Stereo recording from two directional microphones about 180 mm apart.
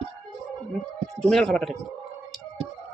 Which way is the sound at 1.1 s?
5° left (ahead or behind).